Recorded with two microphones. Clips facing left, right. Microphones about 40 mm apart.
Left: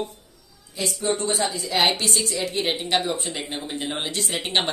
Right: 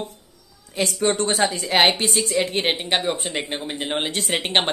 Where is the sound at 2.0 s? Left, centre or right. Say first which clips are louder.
Right 2 dB; right.